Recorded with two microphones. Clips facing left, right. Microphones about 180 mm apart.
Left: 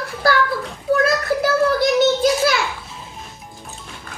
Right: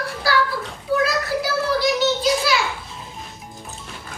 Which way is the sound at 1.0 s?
50° left (ahead or behind).